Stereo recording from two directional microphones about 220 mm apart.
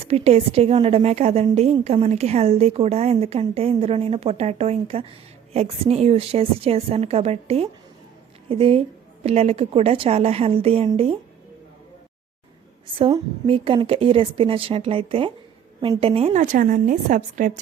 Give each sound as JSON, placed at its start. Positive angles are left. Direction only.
{"t": 0.0, "sound": "a woman's voice", "side_deg": -25}
{"t": 13.0, "sound": "a woman's voice", "side_deg": -25}